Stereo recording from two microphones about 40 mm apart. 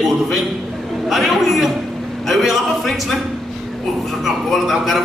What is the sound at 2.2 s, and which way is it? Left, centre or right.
Speech, centre.